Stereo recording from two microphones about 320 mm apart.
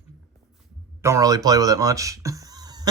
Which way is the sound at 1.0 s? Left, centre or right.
Centre.